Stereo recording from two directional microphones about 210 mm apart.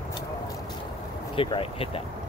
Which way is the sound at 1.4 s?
25° left (ahead or behind).